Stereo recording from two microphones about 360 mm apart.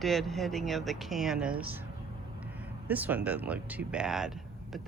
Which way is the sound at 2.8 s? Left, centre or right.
Centre.